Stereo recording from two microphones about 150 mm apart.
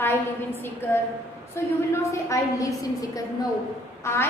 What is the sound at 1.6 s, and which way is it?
A woman's voice, 15° left (ahead or behind).